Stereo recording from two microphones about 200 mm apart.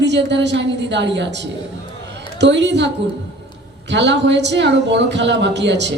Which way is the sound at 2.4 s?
60° right (ahead or behind).